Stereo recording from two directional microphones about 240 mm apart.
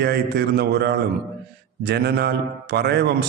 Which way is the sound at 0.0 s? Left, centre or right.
Right.